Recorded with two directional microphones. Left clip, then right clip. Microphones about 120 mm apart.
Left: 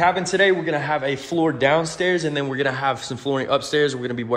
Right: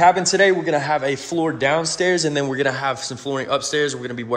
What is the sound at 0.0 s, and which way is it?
A man's voice, 65° right (ahead or behind).